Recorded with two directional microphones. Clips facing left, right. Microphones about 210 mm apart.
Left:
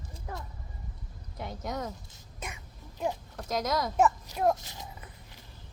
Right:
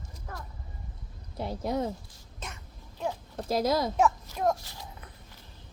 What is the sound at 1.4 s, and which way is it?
Speech, 30° right (ahead or behind).